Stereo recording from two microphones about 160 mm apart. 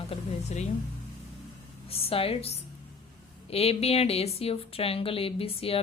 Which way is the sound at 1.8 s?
40° left (ahead or behind).